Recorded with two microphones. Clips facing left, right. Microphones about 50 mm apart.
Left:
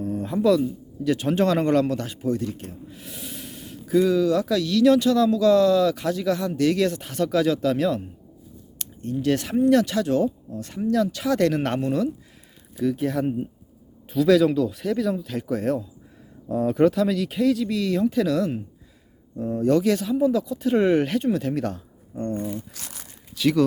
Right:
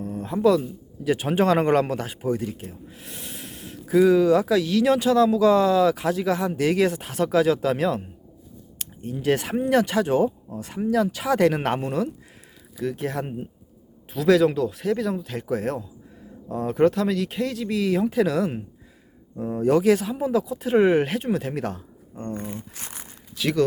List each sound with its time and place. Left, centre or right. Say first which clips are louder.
0.0 s a man's voice: right 1 dB; centre
1.1 s speech: right 1 dB; centre
2.9 s gasp: left 1 dB; centre
4.1 s speech: right 3 dB; right
12.8 s speech: left 4 dB; centre
22.4 s speech: left 3 dB; right
23.4 s speech: left 2 dB; centre